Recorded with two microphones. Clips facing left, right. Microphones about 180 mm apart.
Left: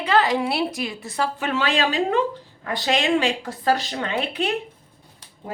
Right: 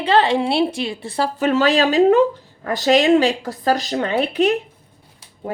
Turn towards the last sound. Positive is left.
turn(degrees=-40)  # may be behind; listen again after turning